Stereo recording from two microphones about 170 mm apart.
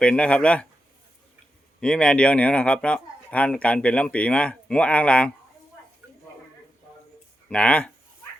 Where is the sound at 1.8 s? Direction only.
5° left (ahead or behind).